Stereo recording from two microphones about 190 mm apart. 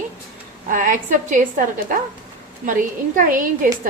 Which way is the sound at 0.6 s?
45° right (ahead or behind).